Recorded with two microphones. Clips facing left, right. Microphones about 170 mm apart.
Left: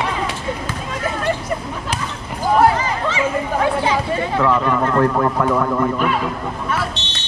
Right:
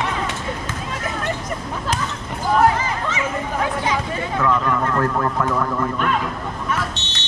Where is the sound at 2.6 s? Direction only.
30° left (ahead or behind).